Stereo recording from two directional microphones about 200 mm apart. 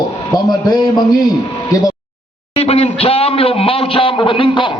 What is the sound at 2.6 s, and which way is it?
A man's voice, 30° left (ahead or behind).